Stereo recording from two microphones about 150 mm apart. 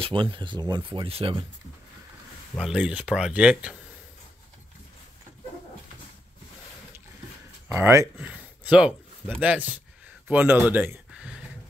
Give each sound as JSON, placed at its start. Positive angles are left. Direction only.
{"t": 0.0, "sound": "speech", "side_deg": -35}
{"t": 2.6, "sound": "speech", "side_deg": -5}
{"t": 7.6, "sound": "speech", "side_deg": -15}
{"t": 10.2, "sound": "a sound", "side_deg": -15}